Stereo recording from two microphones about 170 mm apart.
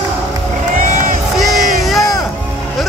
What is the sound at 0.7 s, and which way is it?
Run, 50° right (ahead or behind).